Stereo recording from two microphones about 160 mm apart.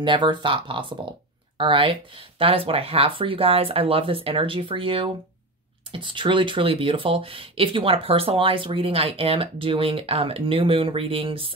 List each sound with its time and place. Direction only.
0.0 s speech: 30° right (ahead or behind)